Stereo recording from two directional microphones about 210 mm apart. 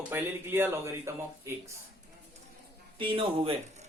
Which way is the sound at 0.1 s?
10° right (ahead or behind).